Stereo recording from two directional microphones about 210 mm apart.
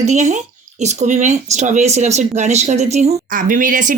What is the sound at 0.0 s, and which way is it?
A woman's voice, 35° right (ahead or behind).